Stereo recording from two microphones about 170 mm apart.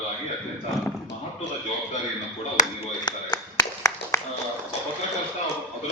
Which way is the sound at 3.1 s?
20° left (ahead or behind).